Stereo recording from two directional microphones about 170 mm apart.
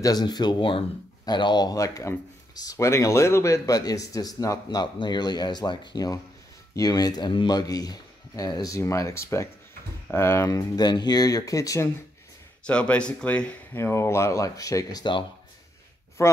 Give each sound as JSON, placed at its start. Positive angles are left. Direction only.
{"t": 0.0, "sound": "speech", "side_deg": 25}
{"t": 12.6, "sound": "speech", "side_deg": 5}